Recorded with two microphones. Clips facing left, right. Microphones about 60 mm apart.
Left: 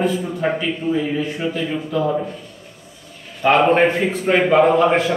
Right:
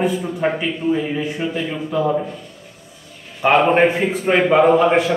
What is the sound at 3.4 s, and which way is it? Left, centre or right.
A man's voice, centre.